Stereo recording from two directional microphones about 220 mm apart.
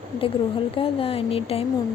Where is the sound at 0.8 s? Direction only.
25° left (ahead or behind).